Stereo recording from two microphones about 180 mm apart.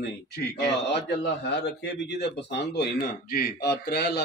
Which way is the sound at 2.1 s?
70° left (ahead or behind).